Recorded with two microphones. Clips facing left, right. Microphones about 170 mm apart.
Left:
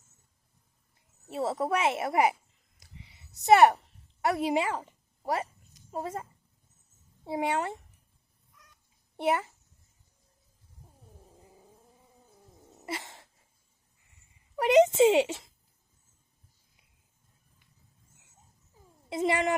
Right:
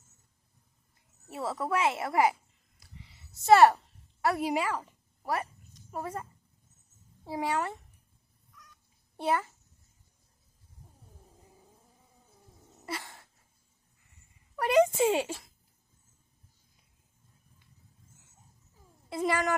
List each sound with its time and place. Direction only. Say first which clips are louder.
1.3 s speech: left 3 dB; 25° left (ahead or behind)
2.7 s a sound: even; 20° left (ahead or behind)
4.2 s a woman's voice: left 2 dB; 20° left (ahead or behind)
7.3 s speech: left 2 dB; 20° left (ahead or behind)
9.1 s speech: left 2 dB; 20° left (ahead or behind)
12.8 s a sound: left 1 dB; 20° left (ahead or behind)
14.5 s speech: left 3 dB; 20° left (ahead or behind)
19.0 s speech: left 2 dB; 20° left (ahead or behind)